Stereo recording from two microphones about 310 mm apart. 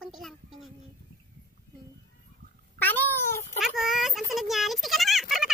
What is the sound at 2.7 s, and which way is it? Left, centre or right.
Cat, centre.